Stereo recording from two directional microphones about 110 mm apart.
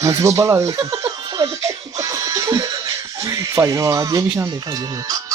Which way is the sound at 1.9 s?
30° right (ahead or behind).